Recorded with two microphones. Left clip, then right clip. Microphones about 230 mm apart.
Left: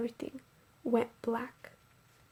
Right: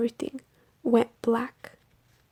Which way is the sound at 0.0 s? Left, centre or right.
Right.